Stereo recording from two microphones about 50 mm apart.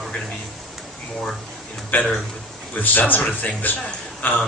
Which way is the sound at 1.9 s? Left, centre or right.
Left.